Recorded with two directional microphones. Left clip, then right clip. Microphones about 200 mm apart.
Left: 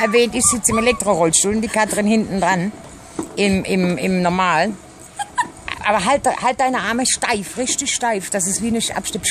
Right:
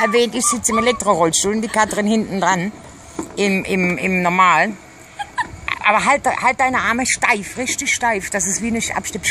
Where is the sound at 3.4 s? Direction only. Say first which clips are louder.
Right 1 dB; 15° left (ahead or behind).